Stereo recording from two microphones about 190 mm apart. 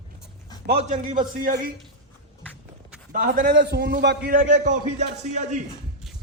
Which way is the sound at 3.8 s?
65° right (ahead or behind).